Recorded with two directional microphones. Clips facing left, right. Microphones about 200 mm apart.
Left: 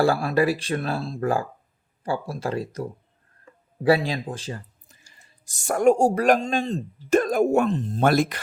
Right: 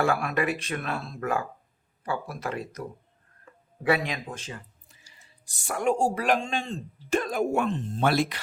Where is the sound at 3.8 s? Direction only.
30° left (ahead or behind).